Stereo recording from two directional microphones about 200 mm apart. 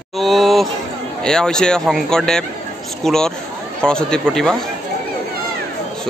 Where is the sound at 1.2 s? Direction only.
5° left (ahead or behind).